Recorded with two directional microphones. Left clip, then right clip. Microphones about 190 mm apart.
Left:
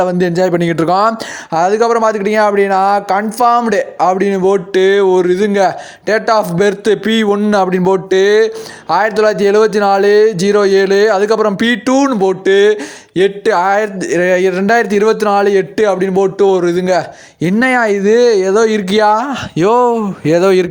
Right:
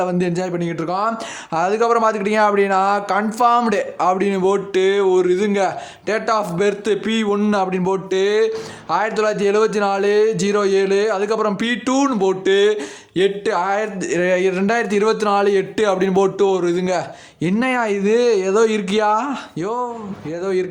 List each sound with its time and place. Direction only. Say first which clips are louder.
0.0 s a man's voice: left 8 dB; 30° left (ahead or behind)
1.5 s speech: left 5 dB; 20° left (ahead or behind)
16.4 s speech: left 6 dB; 25° left (ahead or behind)
19.5 s speech: left 15 dB; 40° left (ahead or behind)